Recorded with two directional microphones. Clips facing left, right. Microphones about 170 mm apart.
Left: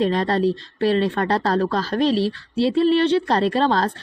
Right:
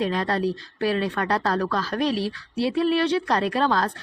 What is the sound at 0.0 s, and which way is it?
Speech, 30° left (ahead or behind).